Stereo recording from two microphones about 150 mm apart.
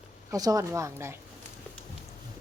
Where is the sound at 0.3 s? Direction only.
25° right (ahead or behind).